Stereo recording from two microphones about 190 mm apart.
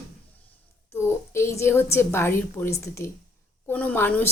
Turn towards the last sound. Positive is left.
turn(degrees=10)  # may be behind; listen again after turning